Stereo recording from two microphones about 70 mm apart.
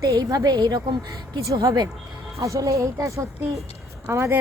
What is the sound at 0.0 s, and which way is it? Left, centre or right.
Speech, right.